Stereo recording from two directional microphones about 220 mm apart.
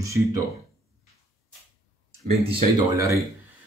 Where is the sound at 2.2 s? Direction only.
25° right (ahead or behind).